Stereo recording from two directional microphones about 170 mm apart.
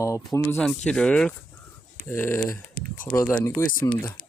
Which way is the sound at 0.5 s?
5° left (ahead or behind).